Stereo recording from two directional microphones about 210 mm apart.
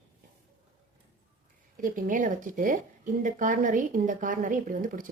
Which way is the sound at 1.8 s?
40° right (ahead or behind).